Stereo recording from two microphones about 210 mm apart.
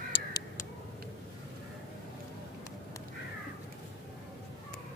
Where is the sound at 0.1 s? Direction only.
20° left (ahead or behind).